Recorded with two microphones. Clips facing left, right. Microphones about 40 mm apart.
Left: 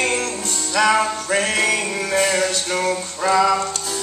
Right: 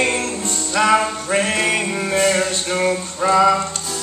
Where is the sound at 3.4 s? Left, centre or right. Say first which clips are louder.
Right 3 dB; centre.